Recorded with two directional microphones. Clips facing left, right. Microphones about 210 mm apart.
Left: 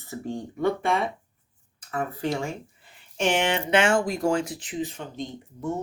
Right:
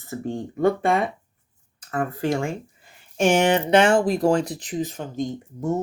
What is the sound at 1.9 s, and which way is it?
Speech, 50° right (ahead or behind).